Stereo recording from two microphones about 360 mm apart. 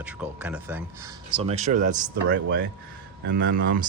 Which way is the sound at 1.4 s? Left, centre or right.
Centre.